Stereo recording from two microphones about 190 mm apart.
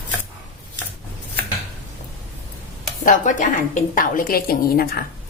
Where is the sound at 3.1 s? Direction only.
40° left (ahead or behind).